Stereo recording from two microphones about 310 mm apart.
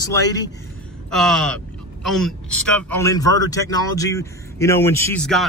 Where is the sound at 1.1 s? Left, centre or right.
Centre.